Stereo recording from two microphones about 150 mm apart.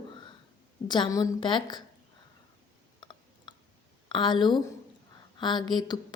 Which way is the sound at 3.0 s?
30° left (ahead or behind).